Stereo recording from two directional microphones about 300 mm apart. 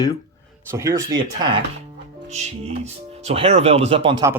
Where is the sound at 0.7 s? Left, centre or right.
Centre.